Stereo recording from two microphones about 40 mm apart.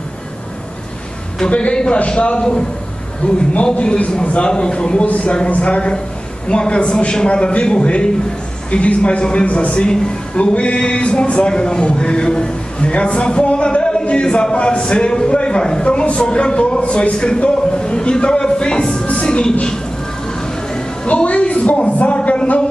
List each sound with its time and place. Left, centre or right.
1.4 s a man's voice: left
3.2 s a man's voice: left
5.0 s a man's voice: left
16.8 s speech: left
17.2 s a man's voice: left
21.1 s a woman's voice: left